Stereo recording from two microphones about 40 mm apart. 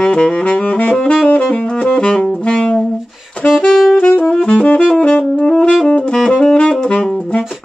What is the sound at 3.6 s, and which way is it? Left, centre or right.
Saxophone, centre.